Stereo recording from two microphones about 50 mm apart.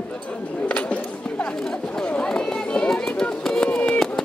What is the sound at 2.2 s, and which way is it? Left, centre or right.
Run, centre.